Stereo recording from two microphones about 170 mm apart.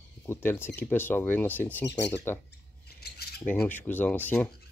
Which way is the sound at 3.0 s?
70° left (ahead or behind).